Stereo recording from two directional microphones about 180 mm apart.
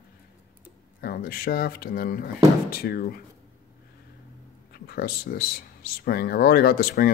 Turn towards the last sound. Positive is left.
turn(degrees=55)  # may be behind; listen again after turning